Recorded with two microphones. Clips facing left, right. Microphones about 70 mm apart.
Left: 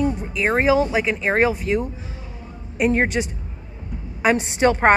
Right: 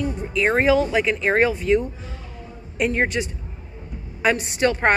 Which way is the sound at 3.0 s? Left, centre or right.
Left.